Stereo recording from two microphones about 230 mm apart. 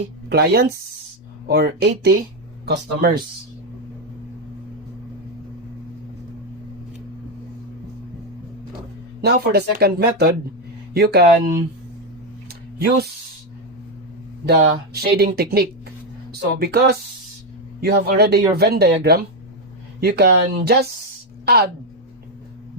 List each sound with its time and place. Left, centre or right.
0.3 s speech: right
9.2 s speech: right
14.4 s a woman's voice: right